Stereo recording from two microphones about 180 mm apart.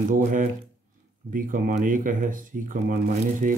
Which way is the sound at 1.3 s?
50° right (ahead or behind).